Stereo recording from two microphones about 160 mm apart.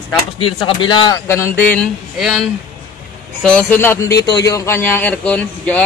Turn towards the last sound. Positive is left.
turn(degrees=10)  # may be behind; listen again after turning